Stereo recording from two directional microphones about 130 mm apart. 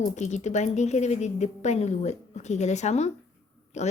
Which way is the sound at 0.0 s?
65° left (ahead or behind).